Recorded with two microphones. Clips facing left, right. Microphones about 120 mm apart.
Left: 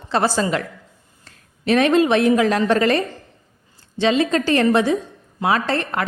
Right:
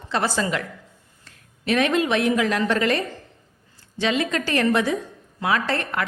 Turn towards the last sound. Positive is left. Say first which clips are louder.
# left 3 dB
turn(degrees=30)  # may be behind; listen again after turning